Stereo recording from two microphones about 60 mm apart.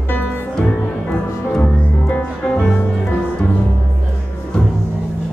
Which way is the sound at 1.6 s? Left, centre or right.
Left.